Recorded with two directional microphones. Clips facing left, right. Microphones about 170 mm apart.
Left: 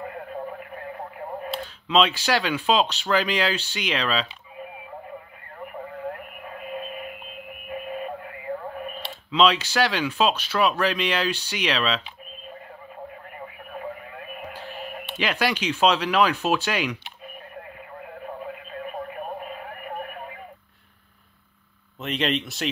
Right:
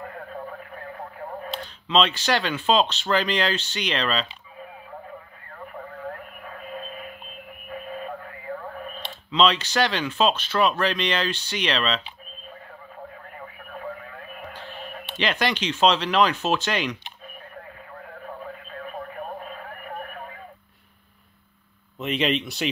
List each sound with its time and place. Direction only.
1.5 s speech: 5° left (ahead or behind)
6.6 s a sound: 15° left (ahead or behind)
8.8 s speech: 10° left (ahead or behind)
14.3 s speech: 10° left (ahead or behind)
19.4 s radio: 15° left (ahead or behind)
22.0 s speech: centre (ahead or behind)